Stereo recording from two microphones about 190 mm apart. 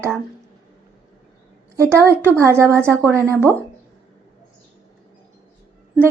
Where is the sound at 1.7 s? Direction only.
15° right (ahead or behind).